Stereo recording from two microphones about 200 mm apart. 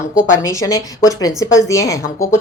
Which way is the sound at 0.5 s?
15° left (ahead or behind).